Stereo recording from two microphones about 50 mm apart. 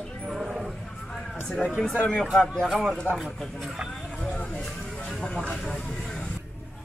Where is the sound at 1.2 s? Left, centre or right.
Centre.